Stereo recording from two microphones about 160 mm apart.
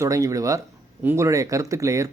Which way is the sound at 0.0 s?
20° right (ahead or behind).